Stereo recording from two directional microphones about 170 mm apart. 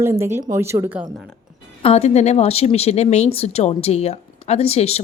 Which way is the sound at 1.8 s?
35° left (ahead or behind).